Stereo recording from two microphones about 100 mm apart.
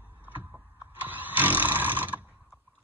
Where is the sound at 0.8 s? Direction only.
20° right (ahead or behind).